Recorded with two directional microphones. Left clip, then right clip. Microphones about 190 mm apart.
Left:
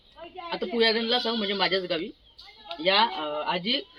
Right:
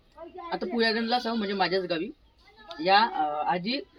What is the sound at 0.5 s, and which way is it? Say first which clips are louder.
A man's voice: left 3 dB; 20° right (ahead or behind).